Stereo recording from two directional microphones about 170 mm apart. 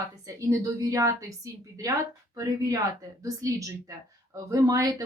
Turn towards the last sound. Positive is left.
turn(degrees=-20)  # may be behind; listen again after turning